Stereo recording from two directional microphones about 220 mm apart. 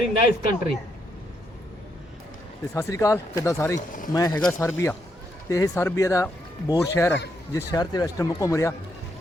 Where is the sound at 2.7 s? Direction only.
15° left (ahead or behind).